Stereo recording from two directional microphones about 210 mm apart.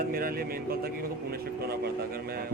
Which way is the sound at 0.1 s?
45° right (ahead or behind).